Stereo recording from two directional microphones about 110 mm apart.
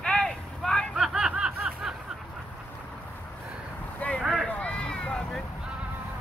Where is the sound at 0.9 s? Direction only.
5° right (ahead or behind).